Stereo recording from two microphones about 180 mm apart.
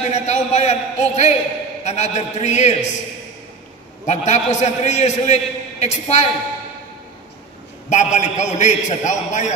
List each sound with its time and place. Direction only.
0.0 s a man's voice: 40° left (ahead or behind)
4.0 s a man's voice: 40° left (ahead or behind)
7.9 s a man's voice: 40° left (ahead or behind)